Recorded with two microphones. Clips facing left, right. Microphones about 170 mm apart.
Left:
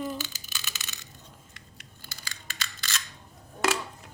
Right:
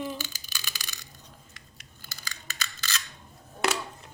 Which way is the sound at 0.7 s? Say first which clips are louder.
Even; 25° left (ahead or behind).